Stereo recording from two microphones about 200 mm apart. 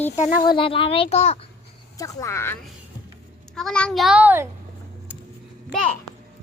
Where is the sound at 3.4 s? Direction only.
Centre (ahead or behind).